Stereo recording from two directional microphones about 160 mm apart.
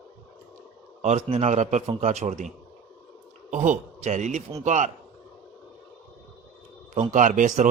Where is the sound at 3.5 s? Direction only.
50° right (ahead or behind).